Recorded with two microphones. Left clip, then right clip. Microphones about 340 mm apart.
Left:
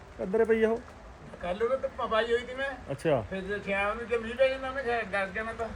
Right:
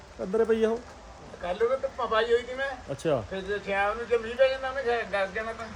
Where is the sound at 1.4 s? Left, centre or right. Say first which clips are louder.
Right 2 dB; right.